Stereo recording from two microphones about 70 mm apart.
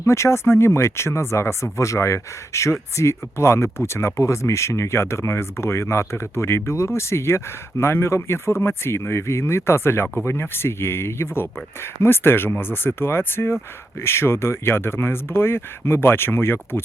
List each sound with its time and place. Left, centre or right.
0.0 s speech: left